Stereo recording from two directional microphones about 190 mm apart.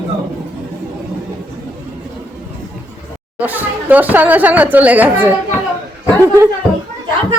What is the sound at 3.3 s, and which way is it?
Speech, 10° right (ahead or behind).